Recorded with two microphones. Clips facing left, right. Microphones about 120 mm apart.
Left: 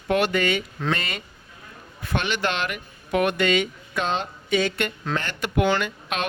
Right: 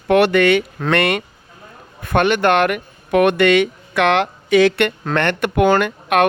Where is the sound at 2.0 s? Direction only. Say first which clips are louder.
Right 10 dB; 55° right (ahead or behind); by 4.9 s 80° right.